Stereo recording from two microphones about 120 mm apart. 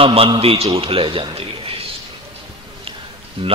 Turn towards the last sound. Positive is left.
turn(degrees=-50)  # may be behind; listen again after turning